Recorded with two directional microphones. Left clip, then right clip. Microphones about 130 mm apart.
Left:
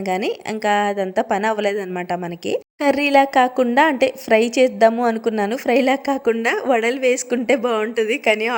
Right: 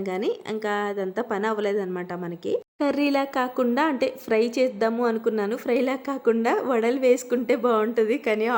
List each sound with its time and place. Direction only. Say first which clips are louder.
0.1 s a woman's voice: left 6 dB; 25° left (ahead or behind)